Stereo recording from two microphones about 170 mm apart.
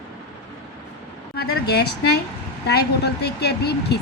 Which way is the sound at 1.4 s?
70° left (ahead or behind).